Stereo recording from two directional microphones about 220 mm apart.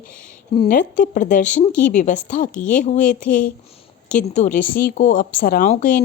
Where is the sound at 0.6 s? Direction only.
40° left (ahead or behind).